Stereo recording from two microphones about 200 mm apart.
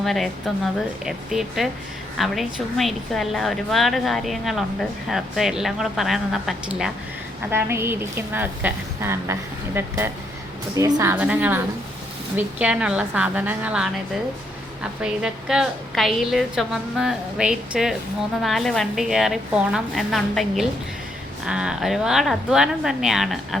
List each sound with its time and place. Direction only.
0.0 s a woman's voice: centre (ahead or behind)
15.0 s a woman's voice: 5° right (ahead or behind)